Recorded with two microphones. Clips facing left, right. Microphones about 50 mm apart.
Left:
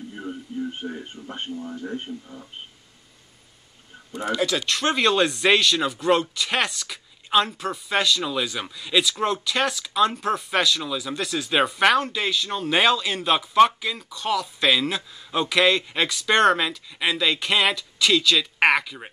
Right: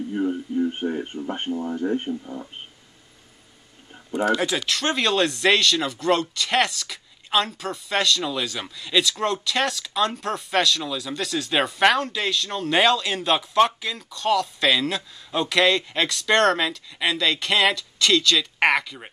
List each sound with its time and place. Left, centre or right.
0.7 s speech: right
4.6 s speech: centre